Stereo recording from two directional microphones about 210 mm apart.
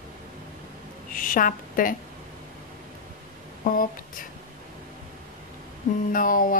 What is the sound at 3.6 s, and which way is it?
Speech, 40° left (ahead or behind).